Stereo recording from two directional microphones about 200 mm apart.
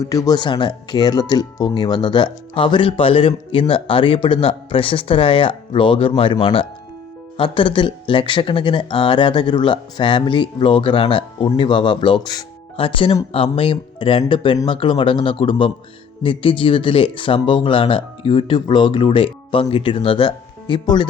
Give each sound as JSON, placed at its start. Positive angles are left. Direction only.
{"t": 0.0, "sound": "speech", "side_deg": 15}